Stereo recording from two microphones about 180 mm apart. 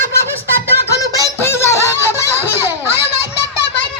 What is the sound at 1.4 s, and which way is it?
Music, 15° left (ahead or behind).